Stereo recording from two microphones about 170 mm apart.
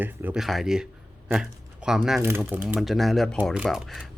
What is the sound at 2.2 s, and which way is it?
Speech, 15° right (ahead or behind).